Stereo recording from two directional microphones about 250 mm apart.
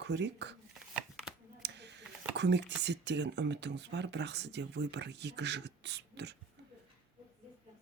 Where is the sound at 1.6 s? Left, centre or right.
Right.